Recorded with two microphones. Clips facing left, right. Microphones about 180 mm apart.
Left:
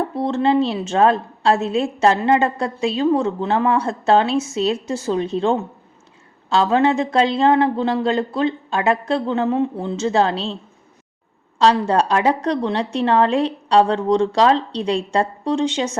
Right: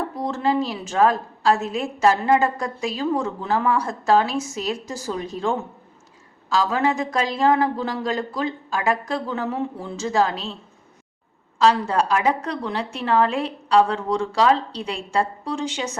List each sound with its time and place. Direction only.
0.3 s a woman's voice: 25° left (ahead or behind)
11.6 s a woman's voice: 30° left (ahead or behind)